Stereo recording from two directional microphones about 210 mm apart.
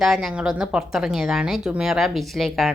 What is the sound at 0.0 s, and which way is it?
Speech, centre (ahead or behind).